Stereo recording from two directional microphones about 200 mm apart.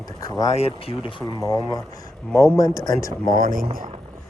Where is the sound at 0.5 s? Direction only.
30° left (ahead or behind).